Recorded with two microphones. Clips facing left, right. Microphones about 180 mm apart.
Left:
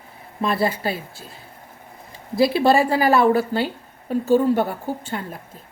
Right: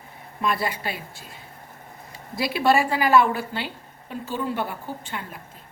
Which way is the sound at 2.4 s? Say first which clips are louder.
Left 5 dB; 30° left (ahead or behind).